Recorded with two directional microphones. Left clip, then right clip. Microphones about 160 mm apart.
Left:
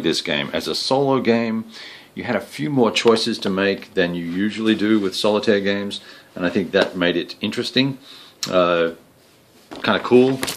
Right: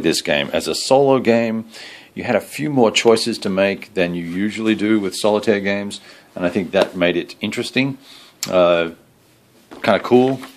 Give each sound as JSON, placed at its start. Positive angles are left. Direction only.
{"t": 0.0, "sound": "speech", "side_deg": -45}